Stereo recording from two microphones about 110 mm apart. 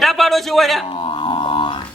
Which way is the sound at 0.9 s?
50° left (ahead or behind).